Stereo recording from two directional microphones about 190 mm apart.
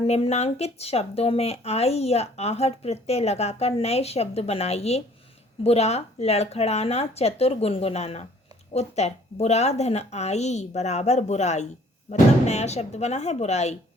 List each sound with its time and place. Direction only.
0.1 s speech: 35° left (ahead or behind)